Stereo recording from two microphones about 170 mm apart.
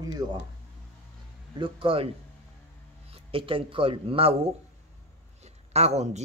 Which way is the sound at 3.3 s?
30° right (ahead or behind).